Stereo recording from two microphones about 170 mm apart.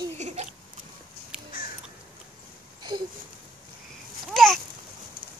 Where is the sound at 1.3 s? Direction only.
5° right (ahead or behind).